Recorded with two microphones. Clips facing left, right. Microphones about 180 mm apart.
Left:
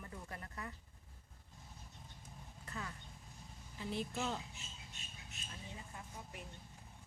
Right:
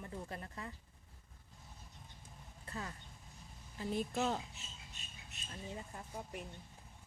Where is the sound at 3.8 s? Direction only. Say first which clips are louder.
Right 4 dB; 45° right (ahead or behind).